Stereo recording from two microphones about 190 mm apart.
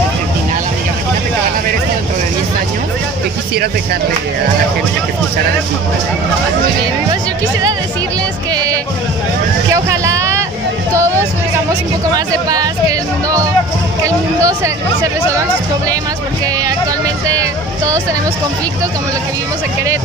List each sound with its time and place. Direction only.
9.7 s vehicle: 15° right (ahead or behind)
14.0 s music: 15° right (ahead or behind)
17.4 s speech: 15° right (ahead or behind)